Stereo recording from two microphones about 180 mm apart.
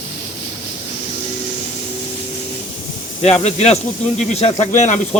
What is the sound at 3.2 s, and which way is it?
Speech, 35° left (ahead or behind).